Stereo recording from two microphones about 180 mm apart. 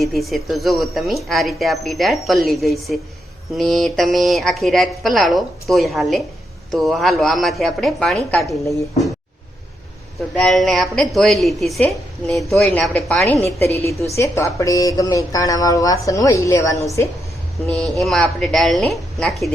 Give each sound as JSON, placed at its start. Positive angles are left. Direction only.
{"t": 0.0, "sound": "a woman's voice", "side_deg": 0}
{"t": 10.2, "sound": "a woman's voice", "side_deg": 0}
{"t": 13.4, "sound": "a woman's voice", "side_deg": 15}
{"t": 17.7, "sound": "a woman's voice", "side_deg": 0}